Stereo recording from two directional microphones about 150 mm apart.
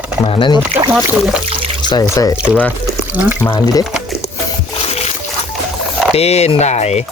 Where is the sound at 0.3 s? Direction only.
35° left (ahead or behind).